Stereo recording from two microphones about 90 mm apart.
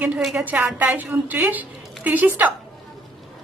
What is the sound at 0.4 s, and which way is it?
A woman's voice, 20° right (ahead or behind).